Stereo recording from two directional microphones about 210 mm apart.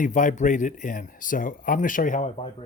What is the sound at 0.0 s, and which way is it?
Speech, 40° left (ahead or behind).